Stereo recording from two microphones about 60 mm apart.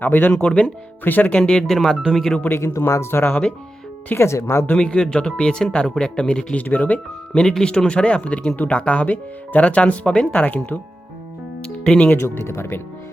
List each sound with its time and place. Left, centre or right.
0.0 s speech: left
0.3 s speech: centre
1.0 s speech: left; by 2.0 s centre
2.0 s speech: centre
2.4 s speech: left
2.7 s speech: left
4.1 s speech: left
4.8 s speech: centre
7.4 s speech: centre
11.6 s music: centre
12.2 s speech: left